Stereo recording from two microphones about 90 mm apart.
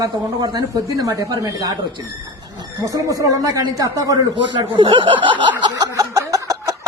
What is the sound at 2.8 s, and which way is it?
Speech, 40° right (ahead or behind).